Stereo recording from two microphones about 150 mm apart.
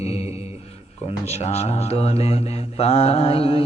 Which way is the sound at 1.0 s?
45° left (ahead or behind).